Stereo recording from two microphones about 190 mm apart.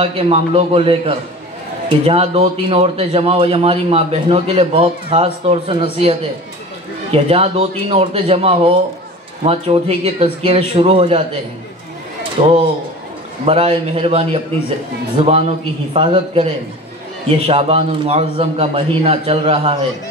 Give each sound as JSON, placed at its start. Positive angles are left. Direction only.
{"t": 0.0, "sound": "a man's voice", "side_deg": -30}
{"t": 12.2, "sound": "a sound", "side_deg": -30}
{"t": 13.5, "sound": "a man's voice", "side_deg": -30}
{"t": 17.5, "sound": "a man's voice", "side_deg": -30}